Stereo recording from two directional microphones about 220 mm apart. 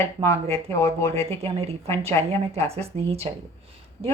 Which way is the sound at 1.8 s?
10° left (ahead or behind).